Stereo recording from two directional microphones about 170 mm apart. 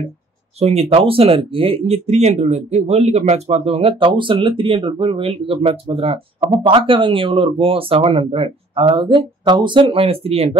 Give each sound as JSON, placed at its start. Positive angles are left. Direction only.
{"t": 0.6, "sound": "speech", "side_deg": -40}